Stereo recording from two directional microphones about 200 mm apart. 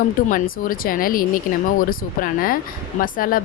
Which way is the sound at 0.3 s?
45° left (ahead or behind).